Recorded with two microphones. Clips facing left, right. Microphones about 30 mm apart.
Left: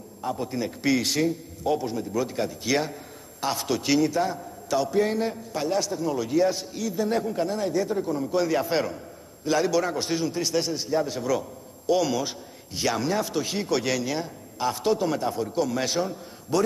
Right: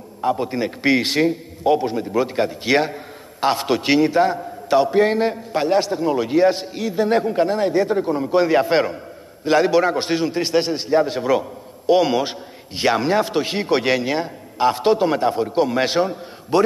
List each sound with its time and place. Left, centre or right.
0.2 s a man's voice: right